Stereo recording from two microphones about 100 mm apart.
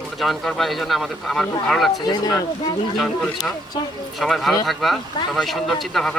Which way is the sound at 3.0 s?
Centre (ahead or behind).